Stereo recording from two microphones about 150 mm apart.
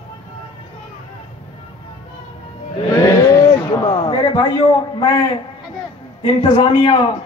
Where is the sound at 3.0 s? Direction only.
20° left (ahead or behind).